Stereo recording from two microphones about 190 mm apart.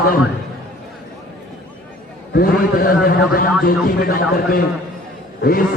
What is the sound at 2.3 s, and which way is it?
A man's voice, 50° left (ahead or behind).